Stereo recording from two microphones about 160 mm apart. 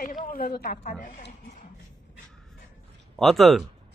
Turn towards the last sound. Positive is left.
turn(degrees=0)  # may be behind; listen again after turning